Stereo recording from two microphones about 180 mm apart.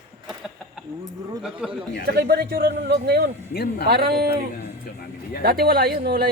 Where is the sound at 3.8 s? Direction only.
60° right (ahead or behind).